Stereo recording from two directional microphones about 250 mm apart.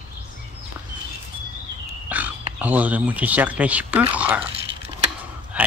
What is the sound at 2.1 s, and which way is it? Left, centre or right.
Speech, centre.